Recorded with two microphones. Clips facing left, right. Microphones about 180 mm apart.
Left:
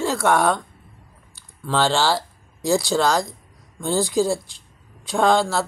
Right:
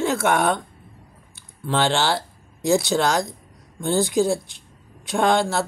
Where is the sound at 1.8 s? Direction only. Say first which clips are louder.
Left 1 dB; 20° right (ahead or behind).